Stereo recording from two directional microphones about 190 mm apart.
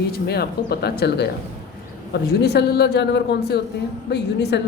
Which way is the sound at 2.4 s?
60° left (ahead or behind).